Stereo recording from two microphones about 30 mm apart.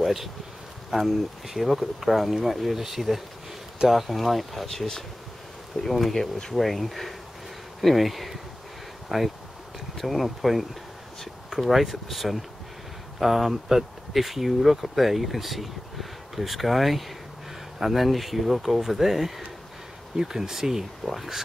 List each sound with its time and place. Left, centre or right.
0.0 s speech: centre
4.6 s speech: centre
5.9 s speech: centre
20.2 s speech: centre